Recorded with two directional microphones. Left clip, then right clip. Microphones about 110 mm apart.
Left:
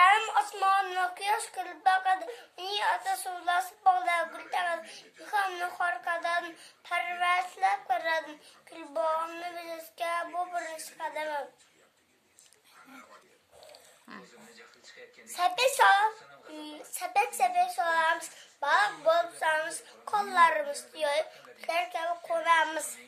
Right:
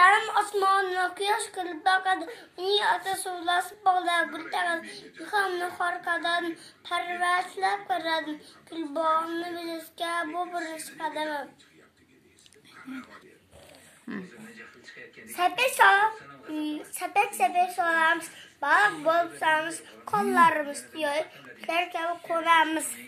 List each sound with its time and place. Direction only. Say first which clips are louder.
0.7 s speech: right 2 dB; 30° left (ahead or behind)
14.1 s a sound: right 8 dB; centre (ahead or behind)
15.2 s a woman's voice: right 2 dB; 20° left (ahead or behind)